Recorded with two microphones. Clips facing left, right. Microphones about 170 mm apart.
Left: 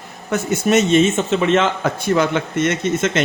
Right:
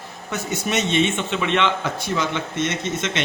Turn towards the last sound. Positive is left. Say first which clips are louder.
# left 7 dB
turn(degrees=50)  # may be behind; listen again after turning